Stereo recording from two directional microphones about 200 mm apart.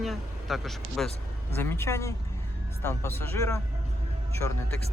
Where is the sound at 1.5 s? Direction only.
10° left (ahead or behind).